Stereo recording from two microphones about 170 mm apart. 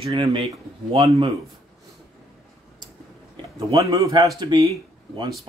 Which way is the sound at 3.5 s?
20° right (ahead or behind).